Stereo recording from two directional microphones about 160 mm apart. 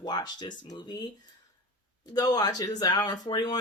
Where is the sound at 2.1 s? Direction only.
25° left (ahead or behind).